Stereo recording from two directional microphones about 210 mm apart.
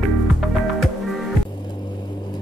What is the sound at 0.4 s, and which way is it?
Music, centre (ahead or behind).